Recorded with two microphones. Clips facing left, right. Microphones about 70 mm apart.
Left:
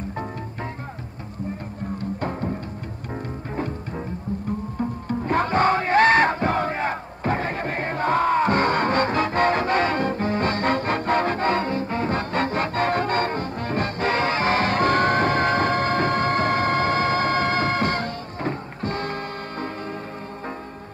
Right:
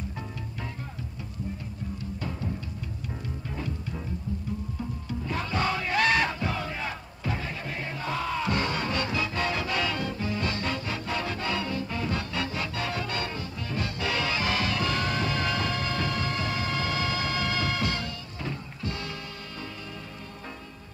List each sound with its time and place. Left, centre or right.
2.0 s music: left
3.5 s music: left